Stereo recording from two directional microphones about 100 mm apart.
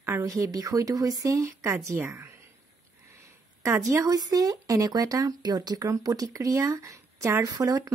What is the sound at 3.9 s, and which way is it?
Speech, 35° right (ahead or behind).